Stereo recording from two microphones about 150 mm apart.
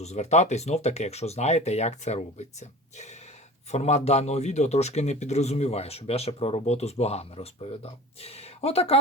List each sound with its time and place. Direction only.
0.0 s a man's voice: 45° left (ahead or behind)